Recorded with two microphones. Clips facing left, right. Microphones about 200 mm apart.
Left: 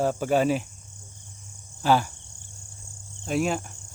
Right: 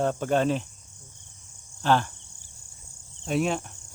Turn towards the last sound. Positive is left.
turn(degrees=0)  # may be behind; listen again after turning